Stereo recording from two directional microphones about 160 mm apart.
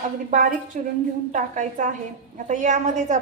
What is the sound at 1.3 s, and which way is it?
A woman's voice, 50° right (ahead or behind).